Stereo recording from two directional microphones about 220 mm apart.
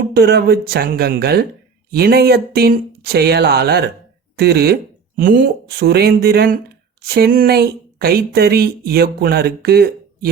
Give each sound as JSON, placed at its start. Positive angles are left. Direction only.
{"t": 0.1, "sound": "speech", "side_deg": -45}